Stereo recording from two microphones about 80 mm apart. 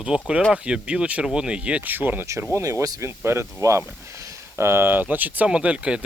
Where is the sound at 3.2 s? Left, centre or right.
Right.